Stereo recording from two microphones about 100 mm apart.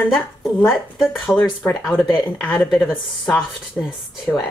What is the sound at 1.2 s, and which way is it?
Speech, 20° left (ahead or behind).